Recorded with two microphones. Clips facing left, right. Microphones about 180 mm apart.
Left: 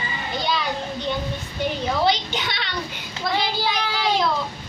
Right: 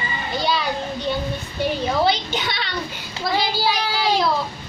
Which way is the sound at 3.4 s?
35° right (ahead or behind).